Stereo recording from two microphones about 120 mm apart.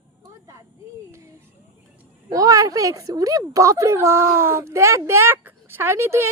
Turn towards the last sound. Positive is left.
turn(degrees=-20)  # may be behind; listen again after turning